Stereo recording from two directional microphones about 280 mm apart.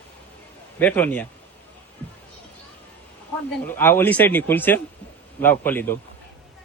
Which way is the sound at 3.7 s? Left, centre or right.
Centre.